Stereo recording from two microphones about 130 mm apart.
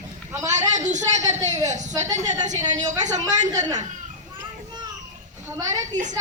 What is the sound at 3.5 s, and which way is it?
Speech, 30° right (ahead or behind).